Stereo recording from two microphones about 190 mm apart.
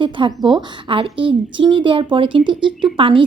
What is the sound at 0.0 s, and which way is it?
A woman's voice, 25° right (ahead or behind).